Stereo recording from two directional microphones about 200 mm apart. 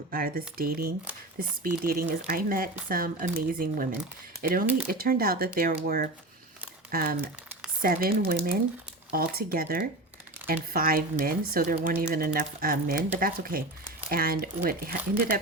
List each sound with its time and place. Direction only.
0.1 s speech: 45° right (ahead or behind)